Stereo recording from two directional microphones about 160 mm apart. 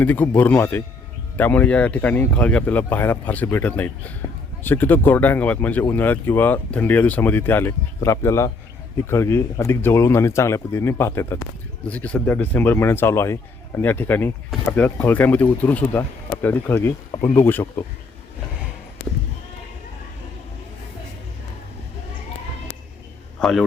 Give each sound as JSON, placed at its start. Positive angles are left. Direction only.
{"t": 0.0, "sound": "speech", "side_deg": 10}
{"t": 23.4, "sound": "a man's voice", "side_deg": 0}